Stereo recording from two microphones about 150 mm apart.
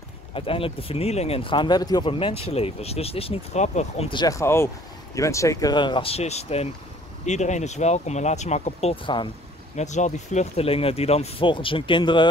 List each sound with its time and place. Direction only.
0.3 s speech: 35° left (ahead or behind)
4.1 s speech: 25° left (ahead or behind); by 8.9 s 50° left (ahead or behind)
8.9 s speech: 35° left (ahead or behind)
9.8 s speech: 50° left (ahead or behind); by 12.3 s 30° left (ahead or behind)